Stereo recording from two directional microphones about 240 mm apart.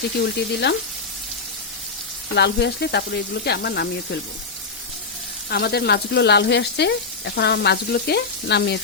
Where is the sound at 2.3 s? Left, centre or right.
Left.